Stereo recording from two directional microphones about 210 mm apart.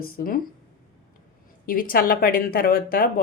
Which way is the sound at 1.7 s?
45° left (ahead or behind).